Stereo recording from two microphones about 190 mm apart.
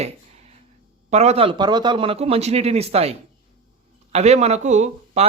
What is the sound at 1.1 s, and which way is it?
A man's voice, 35° right (ahead or behind).